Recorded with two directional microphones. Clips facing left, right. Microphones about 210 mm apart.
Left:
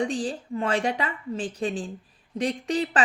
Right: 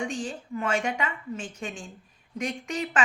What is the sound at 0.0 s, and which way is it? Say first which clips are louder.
A woman's voice: left 5 dB; 35° left (ahead or behind).